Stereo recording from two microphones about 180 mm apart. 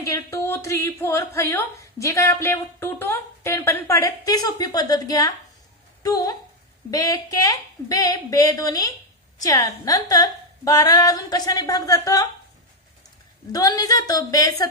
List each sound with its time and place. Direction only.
0.0 s a woman's voice: 15° left (ahead or behind)
13.5 s a woman's voice: 20° left (ahead or behind)